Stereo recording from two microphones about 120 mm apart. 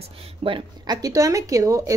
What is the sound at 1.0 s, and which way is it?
Speech, 30° right (ahead or behind).